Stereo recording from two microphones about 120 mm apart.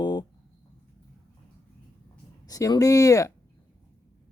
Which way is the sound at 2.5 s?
30° left (ahead or behind).